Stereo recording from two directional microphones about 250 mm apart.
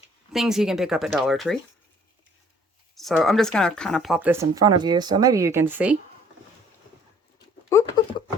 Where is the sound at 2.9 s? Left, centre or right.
Centre.